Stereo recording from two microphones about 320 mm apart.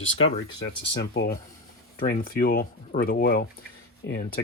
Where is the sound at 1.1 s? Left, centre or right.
Left.